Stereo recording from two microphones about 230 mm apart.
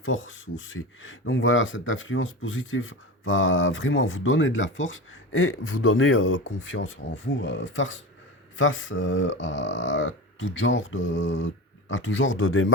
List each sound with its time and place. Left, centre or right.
0.0 s speech: left